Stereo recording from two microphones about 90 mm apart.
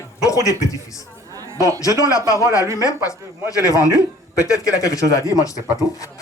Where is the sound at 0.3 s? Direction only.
40° left (ahead or behind).